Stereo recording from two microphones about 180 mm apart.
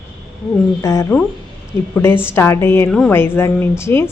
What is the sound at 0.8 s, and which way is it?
A woman's voice, 15° left (ahead or behind).